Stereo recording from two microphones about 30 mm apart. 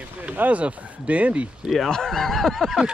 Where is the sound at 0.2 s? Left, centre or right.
Right.